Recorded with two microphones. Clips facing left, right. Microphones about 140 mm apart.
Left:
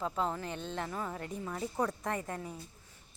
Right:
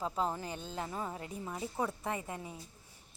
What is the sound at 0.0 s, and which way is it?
A woman's voice, 30° right (ahead or behind).